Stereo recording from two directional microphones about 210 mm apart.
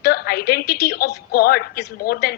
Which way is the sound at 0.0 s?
50° left (ahead or behind).